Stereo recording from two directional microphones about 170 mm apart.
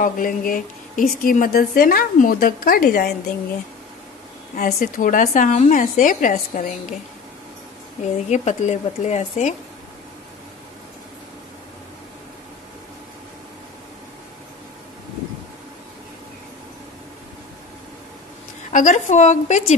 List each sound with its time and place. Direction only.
0.0 s a woman's voice: 55° left (ahead or behind)
4.6 s a woman's voice: 55° left (ahead or behind)
8.3 s a woman's voice: 40° left (ahead or behind)
18.7 s a woman's voice: 50° left (ahead or behind)